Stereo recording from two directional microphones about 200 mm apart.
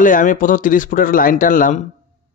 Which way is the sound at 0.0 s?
40° left (ahead or behind).